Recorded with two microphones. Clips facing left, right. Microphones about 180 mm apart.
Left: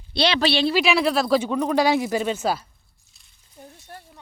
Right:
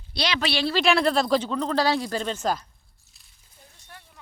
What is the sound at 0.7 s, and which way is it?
Speech, 5° left (ahead or behind).